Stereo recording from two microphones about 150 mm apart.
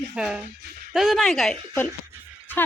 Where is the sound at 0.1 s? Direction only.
5° right (ahead or behind).